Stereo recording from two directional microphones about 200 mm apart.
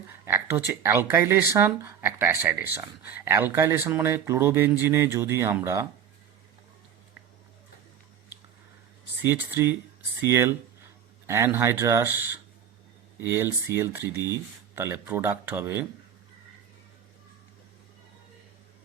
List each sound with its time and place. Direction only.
0.1 s a sound: 10° right (ahead or behind)
0.7 s speech: 10° right (ahead or behind)
9.2 s speech: 10° right (ahead or behind)